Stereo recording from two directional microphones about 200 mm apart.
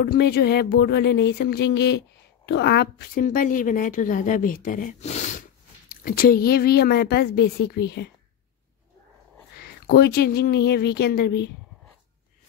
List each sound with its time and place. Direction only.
0.0 s speech: 55° left (ahead or behind); by 5.3 s 35° left (ahead or behind)
5.9 s speech: 50° left (ahead or behind)
9.6 s speech: 50° left (ahead or behind)